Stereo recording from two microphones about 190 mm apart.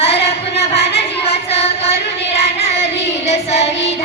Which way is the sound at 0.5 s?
30° left (ahead or behind).